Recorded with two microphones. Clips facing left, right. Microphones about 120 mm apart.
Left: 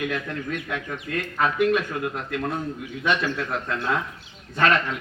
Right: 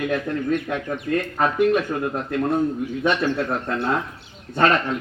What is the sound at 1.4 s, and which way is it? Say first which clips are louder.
Speech: right 1 dB; 35° right (ahead or behind).